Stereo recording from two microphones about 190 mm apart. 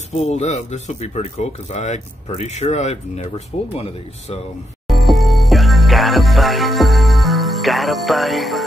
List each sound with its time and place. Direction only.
0.1 s speech: 35° left (ahead or behind)
4.8 s music: centre (ahead or behind)